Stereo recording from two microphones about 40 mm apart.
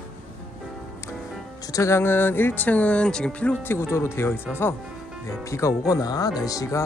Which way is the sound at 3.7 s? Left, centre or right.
Left.